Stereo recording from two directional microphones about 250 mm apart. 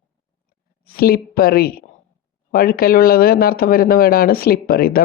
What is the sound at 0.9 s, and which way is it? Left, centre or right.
Speech, left.